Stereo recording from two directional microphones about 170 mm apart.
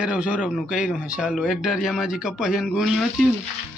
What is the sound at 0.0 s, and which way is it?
Speech, 5° right (ahead or behind).